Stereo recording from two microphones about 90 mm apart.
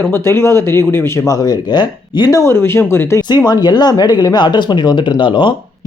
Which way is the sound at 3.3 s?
50° left (ahead or behind).